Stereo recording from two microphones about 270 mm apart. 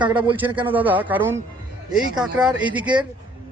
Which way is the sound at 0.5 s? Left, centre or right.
Centre.